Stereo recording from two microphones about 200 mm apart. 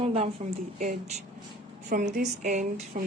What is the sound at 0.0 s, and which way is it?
Speech, 30° right (ahead or behind).